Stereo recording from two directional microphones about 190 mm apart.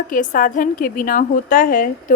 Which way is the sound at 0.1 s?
45° left (ahead or behind).